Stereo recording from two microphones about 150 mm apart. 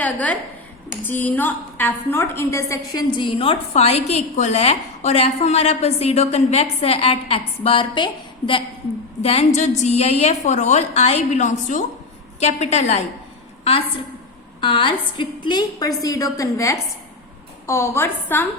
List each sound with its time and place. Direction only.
0.0 s a woman's voice: 10° left (ahead or behind); by 8.6 s 35° left (ahead or behind)
9.2 s a woman's voice: 45° left (ahead or behind)
14.6 s a woman's voice: 35° left (ahead or behind); by 18.4 s 15° left (ahead or behind)